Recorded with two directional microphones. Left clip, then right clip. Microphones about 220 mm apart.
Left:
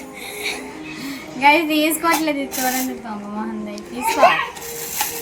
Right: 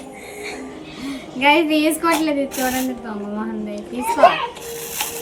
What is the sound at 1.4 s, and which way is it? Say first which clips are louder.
Speech: left 1 dB; 15° left (ahead or behind).